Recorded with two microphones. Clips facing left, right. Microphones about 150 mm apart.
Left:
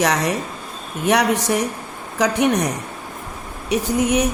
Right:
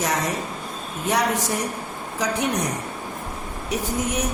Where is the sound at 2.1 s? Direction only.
70° left (ahead or behind).